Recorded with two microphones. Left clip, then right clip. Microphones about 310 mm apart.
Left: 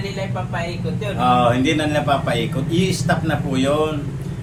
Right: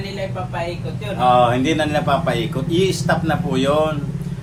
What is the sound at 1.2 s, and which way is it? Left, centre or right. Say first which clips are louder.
A man's voice: right 2 dB; centre.